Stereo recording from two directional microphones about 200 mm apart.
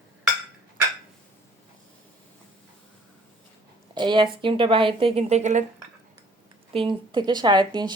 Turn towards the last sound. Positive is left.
turn(degrees=-20)  # may be behind; listen again after turning